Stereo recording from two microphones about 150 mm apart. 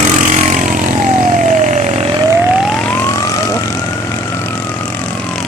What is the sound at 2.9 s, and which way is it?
Emergency vehicle, 20° left (ahead or behind).